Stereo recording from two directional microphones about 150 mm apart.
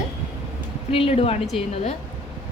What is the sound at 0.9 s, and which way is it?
Speech, 40° left (ahead or behind).